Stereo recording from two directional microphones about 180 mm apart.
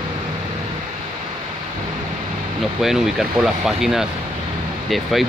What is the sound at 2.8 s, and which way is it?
Speech, centre (ahead or behind).